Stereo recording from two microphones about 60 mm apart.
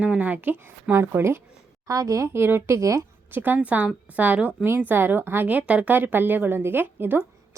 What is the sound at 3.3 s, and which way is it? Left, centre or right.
A woman's voice, right.